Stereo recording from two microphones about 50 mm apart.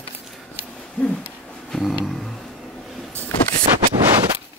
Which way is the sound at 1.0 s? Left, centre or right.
Left.